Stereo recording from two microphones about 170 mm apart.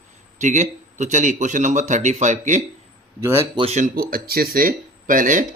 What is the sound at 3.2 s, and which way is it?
Speech, 20° right (ahead or behind).